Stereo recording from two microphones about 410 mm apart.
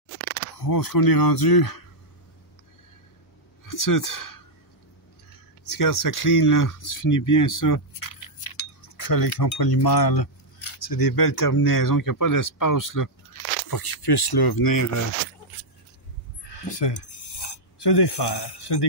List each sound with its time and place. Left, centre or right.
0.6 s speech: left
3.6 s speech: left
5.7 s speech: left
13.7 s speech: left
16.7 s a sound: left